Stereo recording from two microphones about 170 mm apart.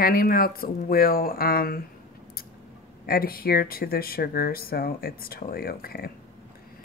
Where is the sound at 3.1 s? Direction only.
60° left (ahead or behind).